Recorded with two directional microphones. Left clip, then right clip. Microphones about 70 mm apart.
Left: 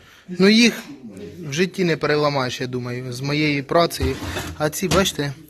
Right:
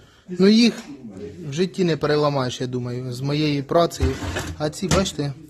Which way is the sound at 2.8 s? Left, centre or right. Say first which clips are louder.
Left 1 dB; right.